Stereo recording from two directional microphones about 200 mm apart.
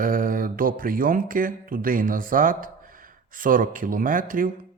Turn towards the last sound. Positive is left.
turn(degrees=-45)  # may be behind; listen again after turning